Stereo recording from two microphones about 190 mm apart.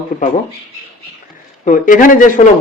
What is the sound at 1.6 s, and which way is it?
Speech, 45° left (ahead or behind).